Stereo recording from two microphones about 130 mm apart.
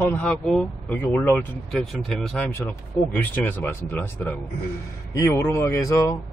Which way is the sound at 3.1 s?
15° left (ahead or behind).